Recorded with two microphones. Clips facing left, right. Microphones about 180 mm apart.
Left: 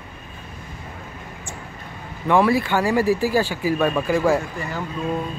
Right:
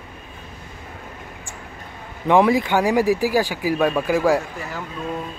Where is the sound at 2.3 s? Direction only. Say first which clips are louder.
Right 2 dB; 15° right (ahead or behind).